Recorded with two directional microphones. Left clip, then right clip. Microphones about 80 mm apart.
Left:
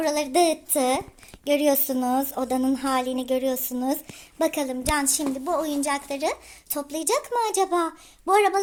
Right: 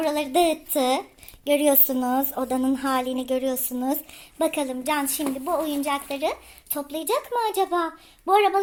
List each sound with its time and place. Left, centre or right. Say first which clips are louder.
0.0 s a woman's voice: even; centre
4.4 s speech: even; left